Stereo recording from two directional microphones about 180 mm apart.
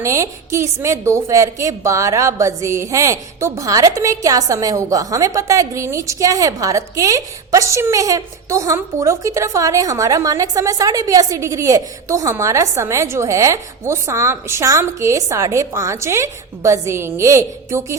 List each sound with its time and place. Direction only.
0.0 s a woman's voice: 15° right (ahead or behind)